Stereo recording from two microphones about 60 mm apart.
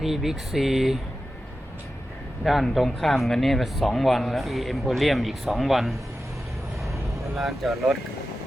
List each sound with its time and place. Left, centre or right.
0.0 s speech: centre
2.4 s speech: centre
6.8 s vehicle: centre